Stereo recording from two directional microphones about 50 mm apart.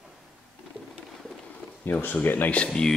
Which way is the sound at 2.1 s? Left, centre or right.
Left.